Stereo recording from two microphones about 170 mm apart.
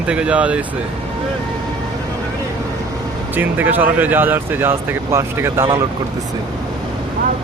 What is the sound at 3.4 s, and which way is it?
Speech, 10° right (ahead or behind).